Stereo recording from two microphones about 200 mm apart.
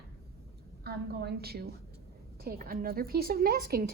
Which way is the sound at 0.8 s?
50° right (ahead or behind).